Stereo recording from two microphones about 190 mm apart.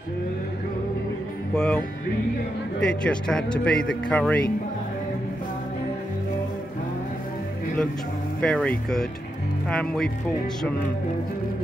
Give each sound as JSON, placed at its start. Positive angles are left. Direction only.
{"t": 1.5, "sound": "speech", "side_deg": 5}
{"t": 2.8, "sound": "speech", "side_deg": 5}
{"t": 8.4, "sound": "speech", "side_deg": 5}